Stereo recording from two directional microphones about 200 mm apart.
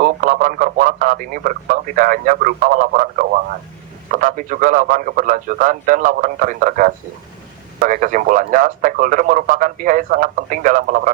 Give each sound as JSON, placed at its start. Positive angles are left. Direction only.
{"t": 0.0, "sound": "a man's voice", "side_deg": -45}